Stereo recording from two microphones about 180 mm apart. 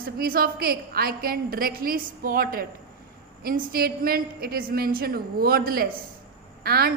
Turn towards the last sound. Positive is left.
turn(degrees=-60)  # may be behind; listen again after turning